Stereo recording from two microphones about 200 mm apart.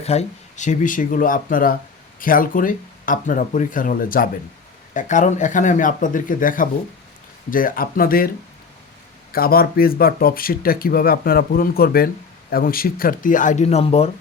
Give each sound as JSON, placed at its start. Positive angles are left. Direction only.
{"t": 0.0, "sound": "speech", "side_deg": 30}
{"t": 9.3, "sound": "speech", "side_deg": 50}